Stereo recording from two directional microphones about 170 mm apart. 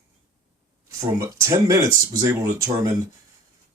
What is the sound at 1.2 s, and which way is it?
Speech, 20° right (ahead or behind).